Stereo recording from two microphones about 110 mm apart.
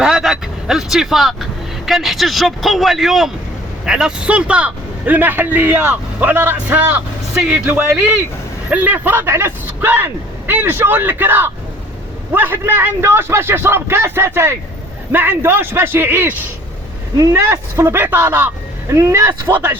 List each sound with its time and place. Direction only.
0.0 s a man's voice: 5° right (ahead or behind)